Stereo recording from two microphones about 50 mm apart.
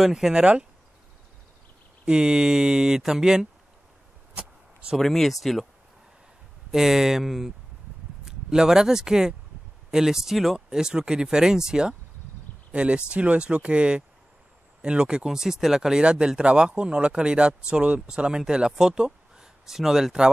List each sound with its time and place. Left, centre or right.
0.0 s speech: centre
2.0 s speech: centre
4.9 s speech: centre
6.7 s speech: centre